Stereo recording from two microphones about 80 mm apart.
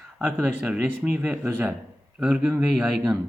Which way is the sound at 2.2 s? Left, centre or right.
Centre.